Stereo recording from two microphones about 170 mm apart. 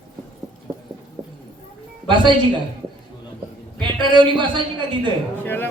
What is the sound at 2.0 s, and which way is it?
Speech, 30° right (ahead or behind).